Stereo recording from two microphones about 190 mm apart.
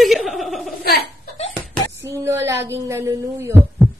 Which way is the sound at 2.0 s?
15° right (ahead or behind).